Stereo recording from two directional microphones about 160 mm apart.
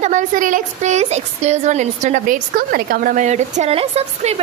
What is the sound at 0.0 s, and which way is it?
A woman's voice, 50° right (ahead or behind).